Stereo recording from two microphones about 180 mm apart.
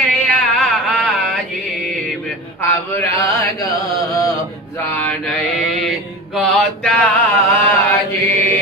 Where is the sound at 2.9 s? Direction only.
15° left (ahead or behind).